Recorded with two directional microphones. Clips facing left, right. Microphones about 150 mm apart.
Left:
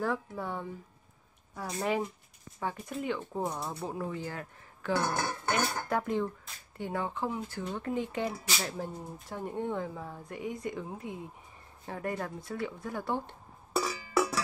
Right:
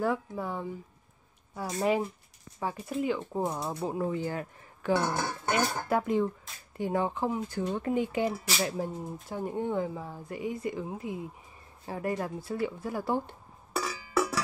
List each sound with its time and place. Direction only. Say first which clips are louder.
0.0 s speech: right 3 dB; 5° right (ahead or behind)
3.5 s speech: right 4 dB; 15° right (ahead or behind)
5.9 s speech: right 4 dB; 10° right (ahead or behind)
13.7 s cowbell: even; 5° left (ahead or behind)